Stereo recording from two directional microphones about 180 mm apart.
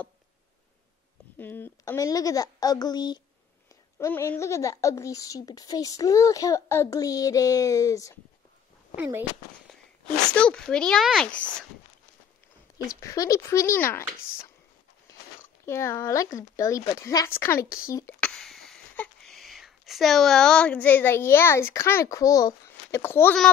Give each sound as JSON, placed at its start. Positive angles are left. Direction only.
{"t": 1.4, "sound": "speech", "side_deg": 10}
{"t": 8.9, "sound": "speech", "side_deg": -10}
{"t": 10.3, "sound": "speech", "side_deg": 5}
{"t": 12.7, "sound": "speech", "side_deg": 20}
{"t": 15.6, "sound": "speech", "side_deg": 15}
{"t": 17.6, "sound": "speech", "side_deg": 55}
{"t": 17.9, "sound": "speech", "side_deg": 15}
{"t": 18.3, "sound": "speech", "side_deg": 0}